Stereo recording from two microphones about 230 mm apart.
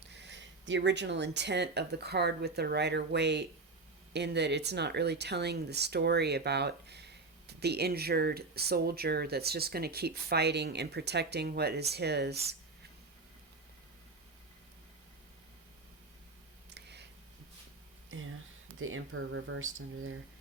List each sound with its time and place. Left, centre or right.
0.1 s speech: right
16.6 s a sound: right
18.8 s speech: right